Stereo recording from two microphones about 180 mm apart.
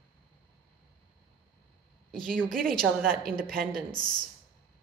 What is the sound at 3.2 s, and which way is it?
Speech, 5° left (ahead or behind).